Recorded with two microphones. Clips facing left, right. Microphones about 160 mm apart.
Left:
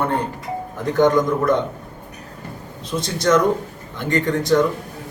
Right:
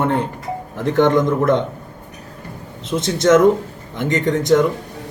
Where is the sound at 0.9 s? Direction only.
25° right (ahead or behind).